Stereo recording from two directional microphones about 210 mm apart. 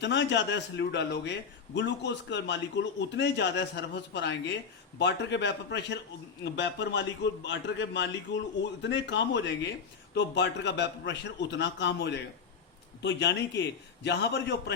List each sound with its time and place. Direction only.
0.0 s a man's voice: 55° left (ahead or behind)